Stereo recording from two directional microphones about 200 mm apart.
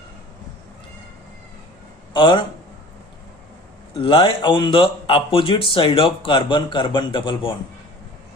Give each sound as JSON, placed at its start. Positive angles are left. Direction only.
{"t": 2.1, "sound": "a man's voice", "side_deg": 25}
{"t": 3.9, "sound": "speech", "side_deg": 25}